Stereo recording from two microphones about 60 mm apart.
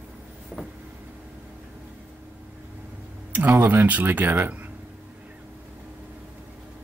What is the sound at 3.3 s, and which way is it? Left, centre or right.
Speech, right.